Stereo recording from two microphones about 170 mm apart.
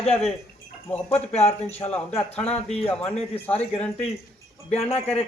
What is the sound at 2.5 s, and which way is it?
Speech, 40° left (ahead or behind).